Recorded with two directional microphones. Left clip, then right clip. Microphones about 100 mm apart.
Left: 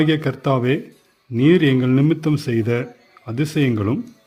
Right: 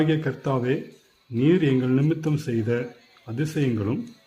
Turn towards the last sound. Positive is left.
turn(degrees=55)  # may be behind; listen again after turning